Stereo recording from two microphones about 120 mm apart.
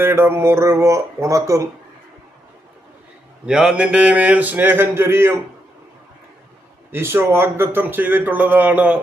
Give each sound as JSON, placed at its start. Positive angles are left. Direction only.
{"t": 0.0, "sound": "speech", "side_deg": -20}
{"t": 3.4, "sound": "speech", "side_deg": -5}
{"t": 6.9, "sound": "speech", "side_deg": -20}